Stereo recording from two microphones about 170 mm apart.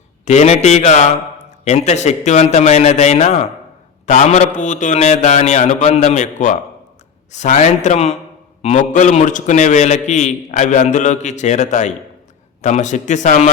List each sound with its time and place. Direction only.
0.3 s a man's voice: 40° left (ahead or behind)